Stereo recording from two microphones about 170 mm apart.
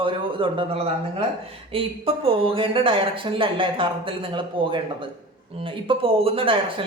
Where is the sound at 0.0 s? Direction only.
30° right (ahead or behind).